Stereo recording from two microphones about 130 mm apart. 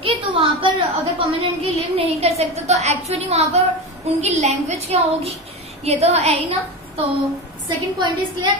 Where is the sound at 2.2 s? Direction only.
55° right (ahead or behind).